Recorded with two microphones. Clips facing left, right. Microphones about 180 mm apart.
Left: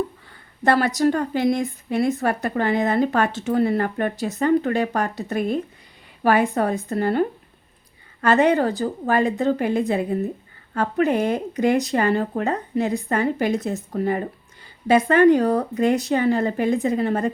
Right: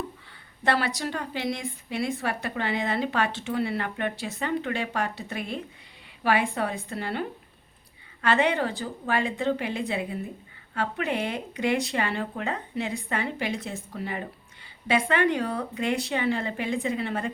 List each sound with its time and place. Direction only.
0.6 s a woman's voice: 45° left (ahead or behind)